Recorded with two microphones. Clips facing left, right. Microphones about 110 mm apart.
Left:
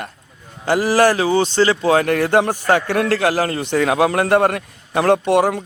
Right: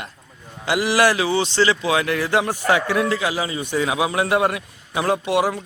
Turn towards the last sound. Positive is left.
turn(degrees=50)  # may be behind; listen again after turning